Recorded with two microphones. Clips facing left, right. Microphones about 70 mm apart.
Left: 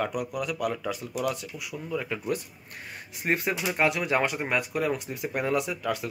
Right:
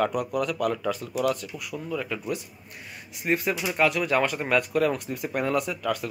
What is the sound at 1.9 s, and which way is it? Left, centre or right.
Speech, left.